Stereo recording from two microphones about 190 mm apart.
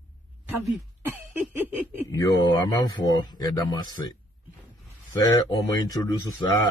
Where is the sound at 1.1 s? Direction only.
10° right (ahead or behind).